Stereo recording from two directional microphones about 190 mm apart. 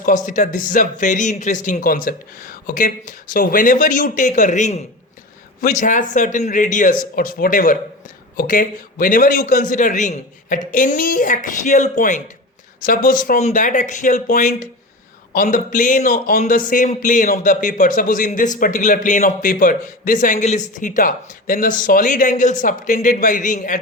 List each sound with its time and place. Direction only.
0.3 s a man's voice: 40° left (ahead or behind)